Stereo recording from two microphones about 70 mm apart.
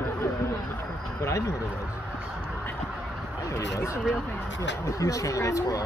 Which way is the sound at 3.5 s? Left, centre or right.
Left.